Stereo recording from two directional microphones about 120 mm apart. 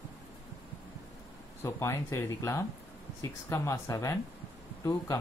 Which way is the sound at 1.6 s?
25° left (ahead or behind).